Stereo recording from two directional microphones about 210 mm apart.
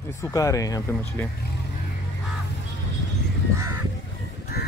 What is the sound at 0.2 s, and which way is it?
Speech, 15° left (ahead or behind).